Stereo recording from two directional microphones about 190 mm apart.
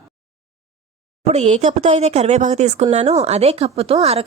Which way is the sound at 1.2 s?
35° right (ahead or behind).